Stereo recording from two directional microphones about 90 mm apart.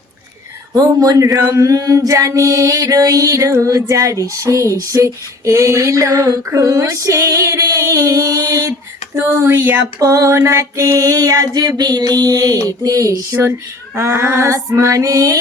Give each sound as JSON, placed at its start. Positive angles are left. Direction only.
{"t": 0.8, "sound": "a man's voice", "side_deg": -45}
{"t": 1.5, "sound": "female singing", "side_deg": -35}